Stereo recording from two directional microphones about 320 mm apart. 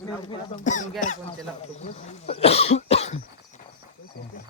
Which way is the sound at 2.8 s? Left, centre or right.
Centre.